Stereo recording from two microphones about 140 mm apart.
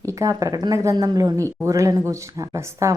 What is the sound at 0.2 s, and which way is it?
A woman's voice, 25° right (ahead or behind).